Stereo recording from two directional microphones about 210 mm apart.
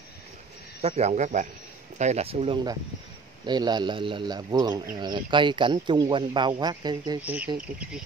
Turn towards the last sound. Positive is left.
turn(degrees=-5)  # may be behind; listen again after turning